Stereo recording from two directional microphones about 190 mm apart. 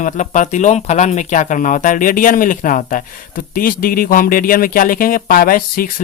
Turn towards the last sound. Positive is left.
turn(degrees=50)  # may be behind; listen again after turning